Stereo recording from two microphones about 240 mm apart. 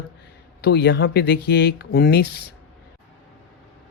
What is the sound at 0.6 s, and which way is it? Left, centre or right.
Speech, left.